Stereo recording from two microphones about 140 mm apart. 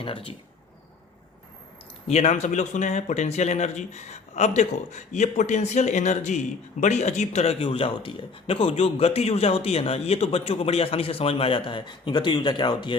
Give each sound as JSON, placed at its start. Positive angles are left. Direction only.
{"t": 0.0, "sound": "speech", "side_deg": 40}
{"t": 2.0, "sound": "speech", "side_deg": 50}